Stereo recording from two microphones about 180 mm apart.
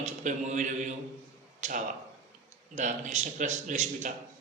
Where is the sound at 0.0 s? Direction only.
40° right (ahead or behind).